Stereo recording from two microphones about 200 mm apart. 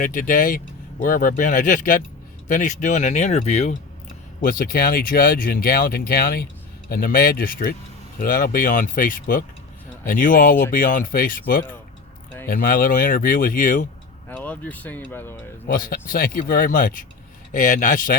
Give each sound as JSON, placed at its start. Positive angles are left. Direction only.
{"t": 0.0, "sound": "speech", "side_deg": 45}
{"t": 4.4, "sound": "speech", "side_deg": 45}
{"t": 14.3, "sound": "speech", "side_deg": 5}
{"t": 15.6, "sound": "speech", "side_deg": 45}